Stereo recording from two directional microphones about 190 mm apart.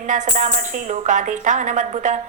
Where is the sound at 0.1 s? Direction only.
40° right (ahead or behind).